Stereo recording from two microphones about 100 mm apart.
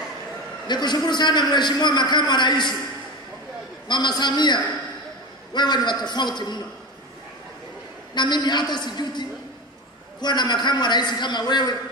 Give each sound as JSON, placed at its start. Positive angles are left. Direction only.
{"t": 0.7, "sound": "a man's voice", "side_deg": 45}
{"t": 3.9, "sound": "a man's voice", "side_deg": 45}
{"t": 8.1, "sound": "a man's voice", "side_deg": 50}
{"t": 10.2, "sound": "a man's voice", "side_deg": 45}